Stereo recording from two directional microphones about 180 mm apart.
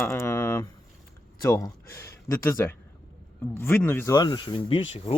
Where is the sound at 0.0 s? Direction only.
15° left (ahead or behind).